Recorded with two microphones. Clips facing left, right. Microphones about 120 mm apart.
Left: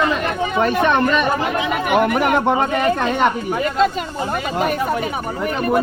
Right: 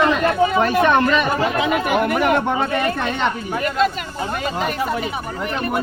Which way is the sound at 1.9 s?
20° left (ahead or behind).